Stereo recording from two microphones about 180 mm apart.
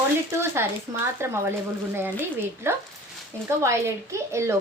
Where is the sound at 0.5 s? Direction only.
15° right (ahead or behind).